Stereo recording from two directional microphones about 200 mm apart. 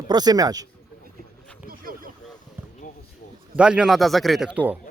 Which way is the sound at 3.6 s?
5° right (ahead or behind).